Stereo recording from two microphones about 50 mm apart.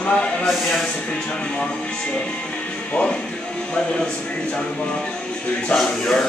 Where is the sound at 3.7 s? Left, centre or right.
Centre.